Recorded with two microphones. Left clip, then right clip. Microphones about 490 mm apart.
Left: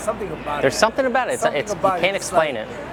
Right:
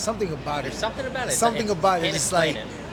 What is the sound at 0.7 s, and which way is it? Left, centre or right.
Speech, left.